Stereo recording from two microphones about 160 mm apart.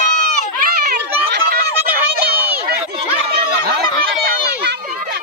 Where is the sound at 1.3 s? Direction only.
80° right.